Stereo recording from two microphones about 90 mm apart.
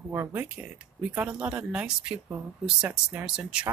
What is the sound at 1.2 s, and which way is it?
Speech, 15° right (ahead or behind).